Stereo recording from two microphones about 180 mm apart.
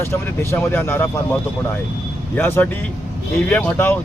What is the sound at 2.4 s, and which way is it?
Speech, 10° left (ahead or behind).